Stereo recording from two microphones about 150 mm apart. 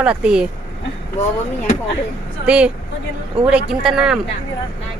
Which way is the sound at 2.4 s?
10° right (ahead or behind).